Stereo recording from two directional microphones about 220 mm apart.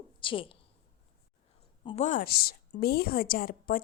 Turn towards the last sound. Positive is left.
turn(degrees=40)  # may be behind; listen again after turning